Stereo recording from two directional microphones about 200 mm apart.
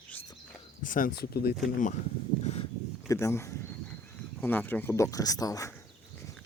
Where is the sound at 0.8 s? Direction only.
40° left (ahead or behind).